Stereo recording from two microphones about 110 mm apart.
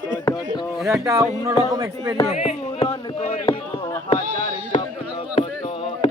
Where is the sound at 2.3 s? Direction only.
70° left (ahead or behind).